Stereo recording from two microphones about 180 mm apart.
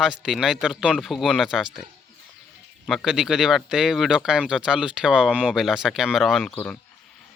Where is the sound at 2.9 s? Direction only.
Centre (ahead or behind).